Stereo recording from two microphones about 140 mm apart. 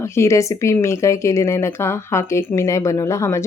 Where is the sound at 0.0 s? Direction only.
20° left (ahead or behind).